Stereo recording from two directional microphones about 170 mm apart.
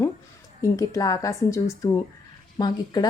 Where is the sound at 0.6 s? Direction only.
20° left (ahead or behind).